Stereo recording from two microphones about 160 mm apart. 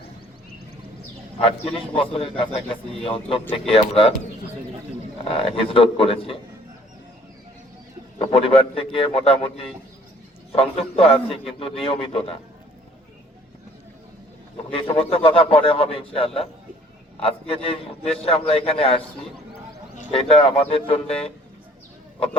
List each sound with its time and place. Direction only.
1.4 s a man's voice: 35° left (ahead or behind)
5.3 s a man's voice: 35° left (ahead or behind)
8.3 s a man's voice: 35° left (ahead or behind)
14.7 s a man's voice: 35° left (ahead or behind)
20.1 s a man's voice: 35° left (ahead or behind)